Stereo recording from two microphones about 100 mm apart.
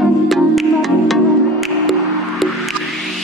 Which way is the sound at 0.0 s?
Centre (ahead or behind).